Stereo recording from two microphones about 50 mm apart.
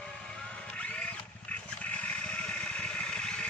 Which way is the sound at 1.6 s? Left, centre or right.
Left.